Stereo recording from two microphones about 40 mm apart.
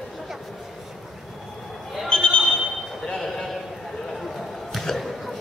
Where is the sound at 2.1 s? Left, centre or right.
Left.